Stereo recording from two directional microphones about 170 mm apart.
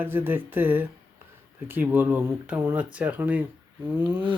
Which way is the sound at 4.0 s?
30° right (ahead or behind).